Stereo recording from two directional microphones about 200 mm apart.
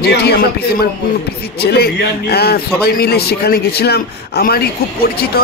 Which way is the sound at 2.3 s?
55° left (ahead or behind).